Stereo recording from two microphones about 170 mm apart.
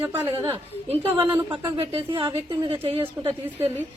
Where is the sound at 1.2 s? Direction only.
15° right (ahead or behind).